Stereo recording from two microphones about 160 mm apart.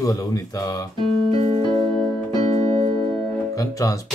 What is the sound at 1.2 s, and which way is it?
Keyboard, 35° right (ahead or behind).